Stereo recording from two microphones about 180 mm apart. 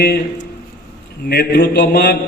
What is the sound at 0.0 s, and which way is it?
A man's voice, 65° left (ahead or behind).